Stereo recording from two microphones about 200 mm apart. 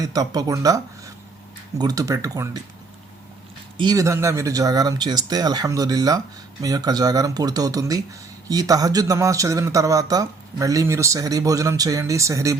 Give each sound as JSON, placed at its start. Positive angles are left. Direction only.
{"t": 0.0, "sound": "speech", "side_deg": -20}
{"t": 3.8, "sound": "speech", "side_deg": -20}